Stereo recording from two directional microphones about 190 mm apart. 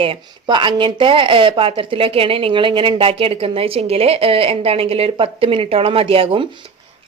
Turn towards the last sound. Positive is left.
turn(degrees=-30)  # may be behind; listen again after turning